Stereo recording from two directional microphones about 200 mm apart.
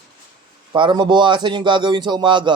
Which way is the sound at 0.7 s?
25° right (ahead or behind).